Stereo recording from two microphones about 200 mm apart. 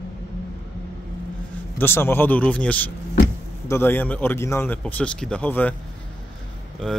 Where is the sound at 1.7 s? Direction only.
10° left (ahead or behind).